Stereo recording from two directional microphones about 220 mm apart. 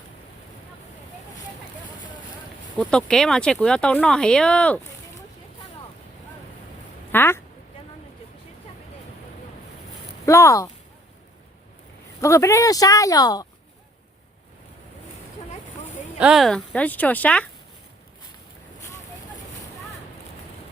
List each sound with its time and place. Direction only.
2.7 s speech: 5° left (ahead or behind)
7.1 s speech: 10° left (ahead or behind)
10.2 s speech: 15° left (ahead or behind)
12.2 s speech: 15° left (ahead or behind)
16.1 s speech: 5° right (ahead or behind)